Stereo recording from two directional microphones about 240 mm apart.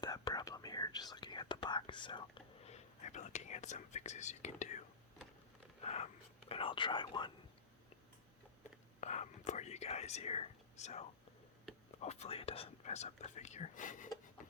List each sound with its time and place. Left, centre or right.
0.0 s whispering: centre
5.8 s speech: left
9.0 s speech: left